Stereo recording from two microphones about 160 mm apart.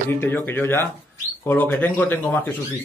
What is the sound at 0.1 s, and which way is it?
Speech, 15° left (ahead or behind).